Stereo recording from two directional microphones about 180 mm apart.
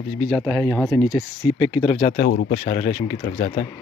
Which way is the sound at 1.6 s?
30° left (ahead or behind).